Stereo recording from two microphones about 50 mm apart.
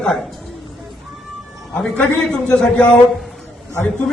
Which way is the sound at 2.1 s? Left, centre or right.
Centre.